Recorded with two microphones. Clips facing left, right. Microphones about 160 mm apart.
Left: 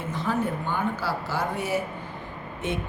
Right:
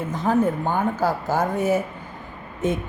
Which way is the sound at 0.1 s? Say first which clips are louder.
Right 6 dB; 45° right (ahead or behind).